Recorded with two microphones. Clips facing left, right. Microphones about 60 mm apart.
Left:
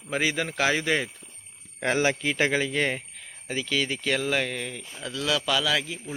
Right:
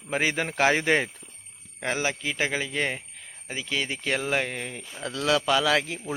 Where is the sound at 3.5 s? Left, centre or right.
Right.